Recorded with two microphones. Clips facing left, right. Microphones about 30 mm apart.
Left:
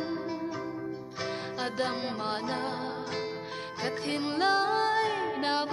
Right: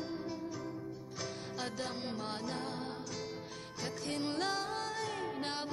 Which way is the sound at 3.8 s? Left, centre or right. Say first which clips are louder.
Left 6 dB; left.